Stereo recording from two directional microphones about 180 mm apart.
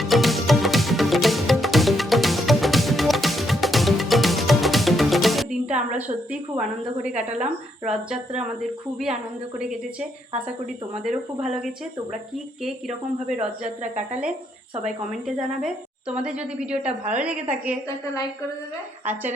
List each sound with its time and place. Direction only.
0.0 s music: centre (ahead or behind)
5.9 s a woman's voice: 5° right (ahead or behind)
9.6 s a woman's voice: 5° right (ahead or behind)
11.4 s a woman's voice: 5° right (ahead or behind)
13.3 s speech: 40° right (ahead or behind)
14.8 s a woman's voice: 5° right (ahead or behind)